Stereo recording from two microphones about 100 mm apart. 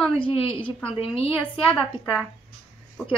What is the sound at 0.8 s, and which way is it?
Speech, 75° left (ahead or behind).